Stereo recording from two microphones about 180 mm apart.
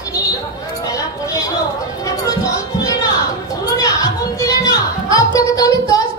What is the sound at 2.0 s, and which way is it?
Music, 20° left (ahead or behind).